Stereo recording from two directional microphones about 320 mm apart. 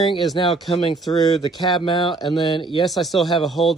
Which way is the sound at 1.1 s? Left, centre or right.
Centre.